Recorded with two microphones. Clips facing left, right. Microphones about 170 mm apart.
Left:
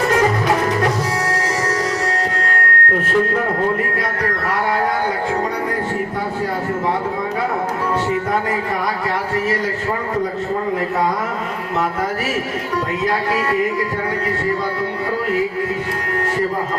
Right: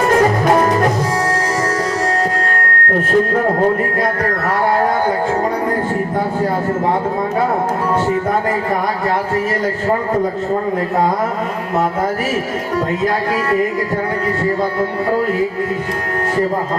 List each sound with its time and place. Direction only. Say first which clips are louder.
0.1 s music: right 6 dB; 45° right (ahead or behind)